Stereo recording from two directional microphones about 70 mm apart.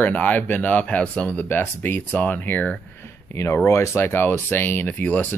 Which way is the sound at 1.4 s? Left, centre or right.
Left.